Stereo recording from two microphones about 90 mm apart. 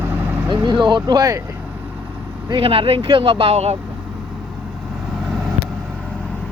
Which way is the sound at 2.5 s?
80° right.